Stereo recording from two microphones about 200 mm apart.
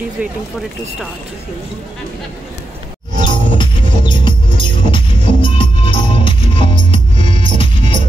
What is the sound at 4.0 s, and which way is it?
Music, 25° left (ahead or behind).